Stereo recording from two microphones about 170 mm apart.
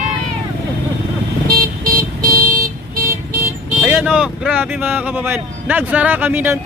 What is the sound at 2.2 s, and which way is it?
Vehicle, 20° right (ahead or behind).